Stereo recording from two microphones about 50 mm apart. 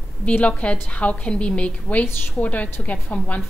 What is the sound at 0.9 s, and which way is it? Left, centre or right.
A woman's voice, left.